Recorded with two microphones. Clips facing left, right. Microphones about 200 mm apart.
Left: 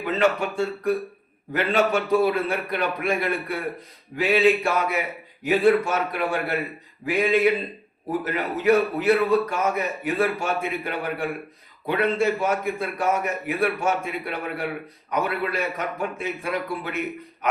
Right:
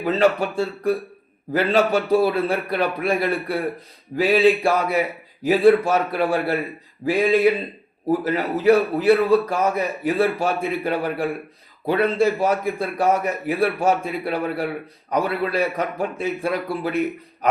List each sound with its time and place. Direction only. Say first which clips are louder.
0.0 s a man's voice: right 3 dB; 35° right (ahead or behind)